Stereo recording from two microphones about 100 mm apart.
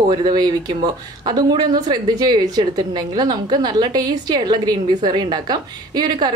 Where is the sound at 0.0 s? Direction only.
45° right (ahead or behind).